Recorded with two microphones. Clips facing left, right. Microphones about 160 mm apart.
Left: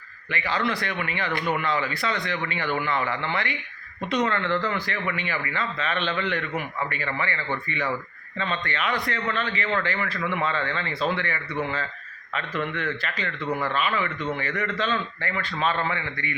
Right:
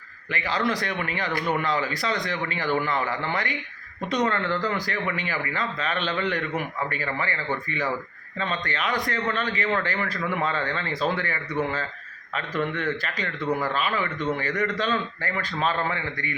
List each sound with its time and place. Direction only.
0.3 s speech: 40° right (ahead or behind)